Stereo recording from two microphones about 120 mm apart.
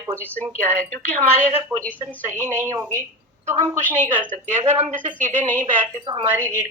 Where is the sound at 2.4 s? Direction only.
20° right (ahead or behind).